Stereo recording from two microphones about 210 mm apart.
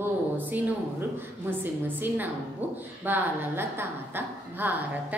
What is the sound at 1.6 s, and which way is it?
A woman's voice, 10° right (ahead or behind).